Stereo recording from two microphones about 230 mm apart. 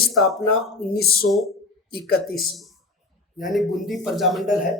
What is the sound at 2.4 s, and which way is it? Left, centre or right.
Speech, centre.